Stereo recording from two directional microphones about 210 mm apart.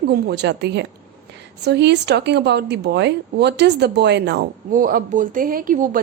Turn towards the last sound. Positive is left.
turn(degrees=-40)  # may be behind; listen again after turning